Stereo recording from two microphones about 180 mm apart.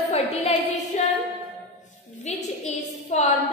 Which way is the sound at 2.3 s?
40° left (ahead or behind).